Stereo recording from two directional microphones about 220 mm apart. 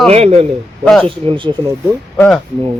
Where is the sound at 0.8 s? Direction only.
5° left (ahead or behind).